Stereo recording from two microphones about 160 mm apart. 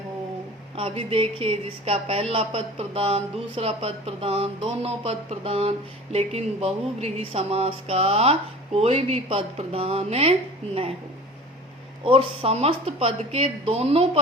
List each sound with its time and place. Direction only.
0.8 s a woman's voice: 35° right (ahead or behind)
12.0 s a woman's voice: 35° right (ahead or behind)